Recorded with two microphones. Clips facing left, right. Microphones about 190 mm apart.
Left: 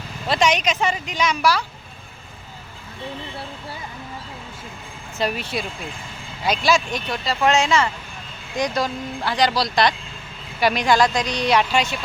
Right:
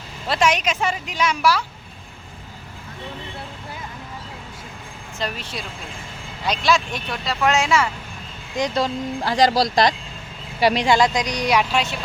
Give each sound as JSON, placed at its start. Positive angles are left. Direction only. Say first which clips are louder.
{"t": 0.3, "sound": "speech", "louder": "even", "side_deg": -5}
{"t": 5.2, "sound": "speech", "louder": "left 4 dB", "side_deg": 10}
{"t": 6.4, "sound": "speech", "louder": "left 1 dB", "side_deg": 5}
{"t": 8.5, "sound": "speech", "louder": "right 1 dB", "side_deg": -25}
{"t": 9.2, "sound": "speech", "louder": "right 3 dB", "side_deg": -40}
{"t": 10.6, "sound": "speech", "louder": "right 1 dB", "side_deg": -30}
{"t": 11.7, "sound": "speech", "louder": "left 1 dB", "side_deg": 0}